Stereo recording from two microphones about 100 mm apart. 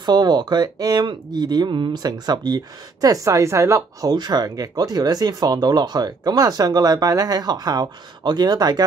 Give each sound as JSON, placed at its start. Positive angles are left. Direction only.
{"t": 0.0, "sound": "speech", "side_deg": -45}
{"t": 4.1, "sound": "speech", "side_deg": -45}